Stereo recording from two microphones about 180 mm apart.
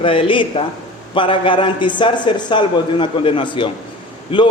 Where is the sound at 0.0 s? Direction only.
30° left (ahead or behind).